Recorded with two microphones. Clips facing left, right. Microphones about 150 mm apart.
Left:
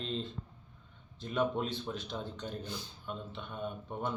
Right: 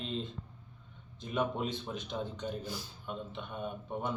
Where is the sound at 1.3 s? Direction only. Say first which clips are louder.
Left 1 dB; 5° right (ahead or behind).